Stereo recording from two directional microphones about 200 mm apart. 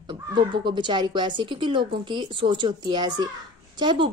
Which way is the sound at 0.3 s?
25° right (ahead or behind).